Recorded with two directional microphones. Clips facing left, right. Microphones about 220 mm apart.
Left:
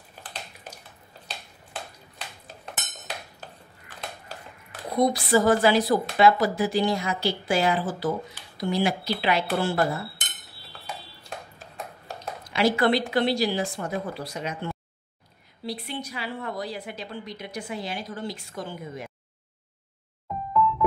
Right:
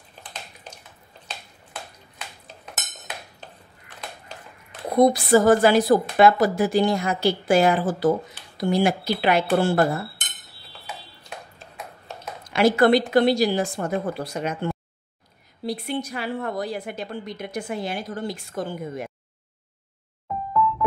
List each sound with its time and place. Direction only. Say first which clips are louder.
4.9 s a woman's voice: right 5 dB; 50° right (ahead or behind)
12.5 s a woman's voice: right 5 dB; 50° right (ahead or behind)